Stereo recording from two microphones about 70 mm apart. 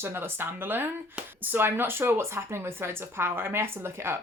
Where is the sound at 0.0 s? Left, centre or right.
Right.